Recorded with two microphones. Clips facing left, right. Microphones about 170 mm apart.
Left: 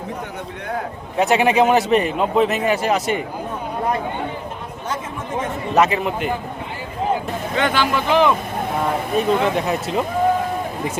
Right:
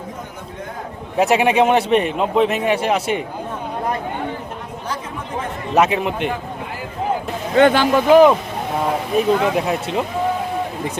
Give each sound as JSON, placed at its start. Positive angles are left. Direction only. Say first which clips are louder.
{"t": 1.1, "sound": "a man's voice", "louder": "right 1 dB", "side_deg": 0}
{"t": 5.7, "sound": "a man's voice", "louder": "right 1 dB", "side_deg": 0}
{"t": 7.5, "sound": "speech", "louder": "right 7 dB", "side_deg": -50}
{"t": 9.1, "sound": "a man's voice", "louder": "right 2 dB", "side_deg": 0}